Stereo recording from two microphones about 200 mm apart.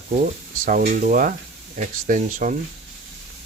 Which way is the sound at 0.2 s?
40° right (ahead or behind).